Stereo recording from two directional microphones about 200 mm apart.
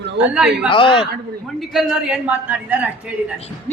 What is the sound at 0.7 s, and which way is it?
Speech, 25° left (ahead or behind).